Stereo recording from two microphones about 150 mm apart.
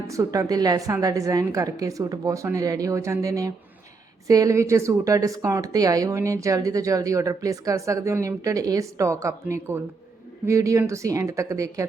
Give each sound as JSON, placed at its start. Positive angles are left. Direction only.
{"t": 0.1, "sound": "a woman's voice", "side_deg": -20}